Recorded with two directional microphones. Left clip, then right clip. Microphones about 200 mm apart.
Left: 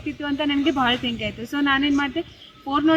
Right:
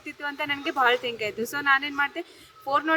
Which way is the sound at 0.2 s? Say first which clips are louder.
Left 5 dB; 15° right (ahead or behind).